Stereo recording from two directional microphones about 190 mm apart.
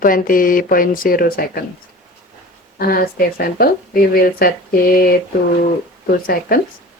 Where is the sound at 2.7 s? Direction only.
50° left (ahead or behind).